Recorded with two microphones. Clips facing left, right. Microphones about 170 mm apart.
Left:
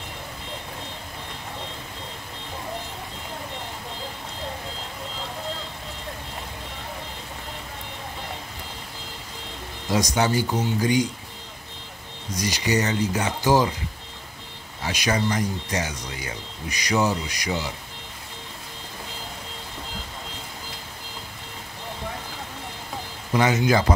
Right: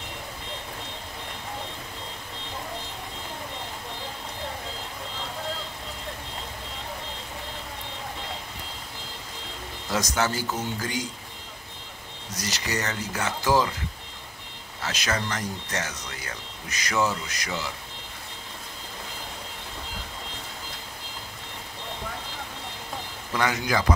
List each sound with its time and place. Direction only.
9.8 s speech: 15° left (ahead or behind)
12.4 s speech: 15° left (ahead or behind)
14.8 s speech: 15° left (ahead or behind)
23.3 s speech: 20° left (ahead or behind)